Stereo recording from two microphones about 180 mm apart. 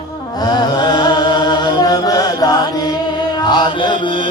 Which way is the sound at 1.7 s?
20° left (ahead or behind).